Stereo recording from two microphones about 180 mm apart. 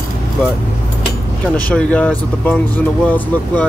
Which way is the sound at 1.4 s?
5° left (ahead or behind).